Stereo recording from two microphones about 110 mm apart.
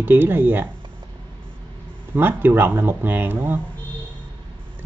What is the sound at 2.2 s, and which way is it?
Speech, 20° right (ahead or behind).